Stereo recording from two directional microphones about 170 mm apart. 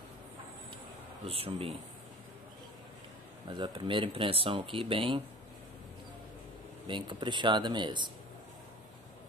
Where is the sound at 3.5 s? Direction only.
30° right (ahead or behind).